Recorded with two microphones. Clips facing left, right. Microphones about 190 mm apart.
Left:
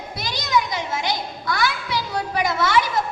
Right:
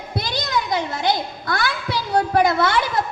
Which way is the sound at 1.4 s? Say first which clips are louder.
Left 1 dB; 55° right (ahead or behind).